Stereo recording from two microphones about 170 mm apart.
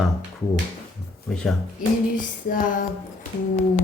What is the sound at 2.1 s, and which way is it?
Female singing, 50° left (ahead or behind).